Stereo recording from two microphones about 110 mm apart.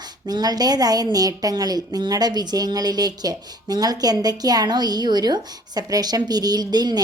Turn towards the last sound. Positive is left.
turn(degrees=-40)  # may be behind; listen again after turning